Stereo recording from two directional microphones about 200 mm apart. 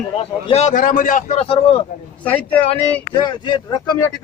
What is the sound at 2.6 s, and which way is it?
Speech, 25° left (ahead or behind).